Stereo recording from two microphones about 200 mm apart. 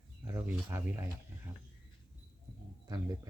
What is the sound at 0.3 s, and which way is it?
Speech, 10° right (ahead or behind).